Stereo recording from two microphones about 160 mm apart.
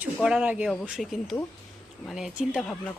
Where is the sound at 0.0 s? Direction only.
5° right (ahead or behind).